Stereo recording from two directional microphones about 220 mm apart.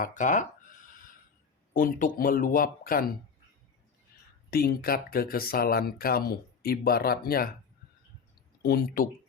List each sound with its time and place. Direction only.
0.0 s a sound: 35° left (ahead or behind)
1.7 s speech: 40° left (ahead or behind)
4.5 s speech: 45° left (ahead or behind)
8.6 s speech: 45° left (ahead or behind)